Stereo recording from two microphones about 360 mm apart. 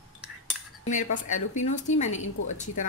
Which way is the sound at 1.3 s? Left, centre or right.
Centre.